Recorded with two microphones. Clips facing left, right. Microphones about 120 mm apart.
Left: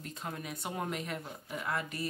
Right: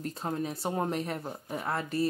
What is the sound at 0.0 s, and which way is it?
Speech, 35° right (ahead or behind).